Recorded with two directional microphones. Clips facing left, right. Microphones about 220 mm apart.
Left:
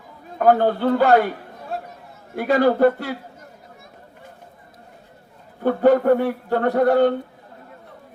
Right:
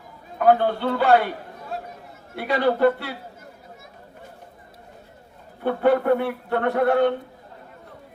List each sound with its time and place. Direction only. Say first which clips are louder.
0.3 s a man's voice: left 2 dB; 45° left (ahead or behind)
2.3 s a man's voice: left 4 dB; 45° left (ahead or behind)
5.6 s a man's voice: left 4 dB; 40° left (ahead or behind)